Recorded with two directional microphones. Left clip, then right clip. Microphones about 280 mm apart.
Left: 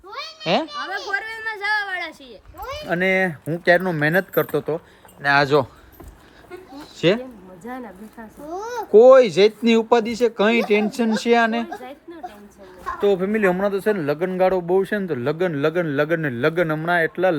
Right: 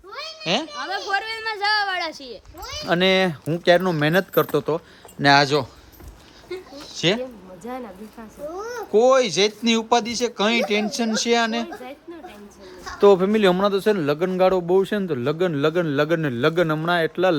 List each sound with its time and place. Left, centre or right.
0.4 s a sound: centre
3.2 s speech: centre
6.7 s speech: centre
8.5 s a child's voice: left
8.9 s speech: centre
11.8 s a sound: centre
13.0 s speech: centre